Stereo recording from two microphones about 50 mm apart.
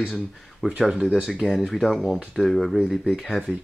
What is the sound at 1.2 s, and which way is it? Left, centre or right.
Speech, centre.